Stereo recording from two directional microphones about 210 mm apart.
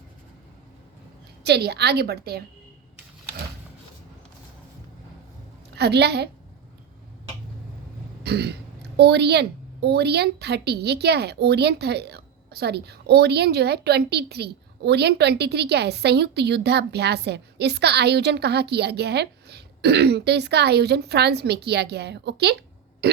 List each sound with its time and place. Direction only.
1.5 s a woman's voice: 50° right (ahead or behind)
5.7 s a woman's voice: 50° right (ahead or behind)
8.2 s throat clearing: 50° right (ahead or behind)
9.0 s a woman's voice: 50° right (ahead or behind)